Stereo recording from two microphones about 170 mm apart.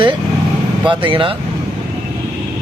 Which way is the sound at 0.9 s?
30° right (ahead or behind).